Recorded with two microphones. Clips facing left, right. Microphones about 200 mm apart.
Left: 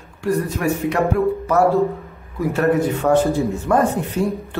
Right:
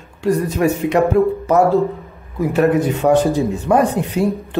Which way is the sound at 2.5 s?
20° right (ahead or behind).